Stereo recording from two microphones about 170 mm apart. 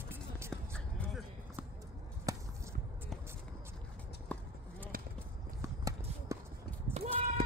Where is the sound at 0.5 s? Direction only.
5° left (ahead or behind).